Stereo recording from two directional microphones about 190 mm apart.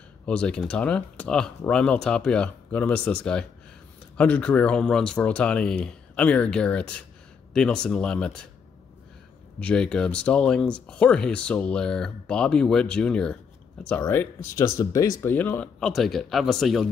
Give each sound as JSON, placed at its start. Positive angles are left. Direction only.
{"t": 0.2, "sound": "speech", "side_deg": 5}
{"t": 9.6, "sound": "speech", "side_deg": 5}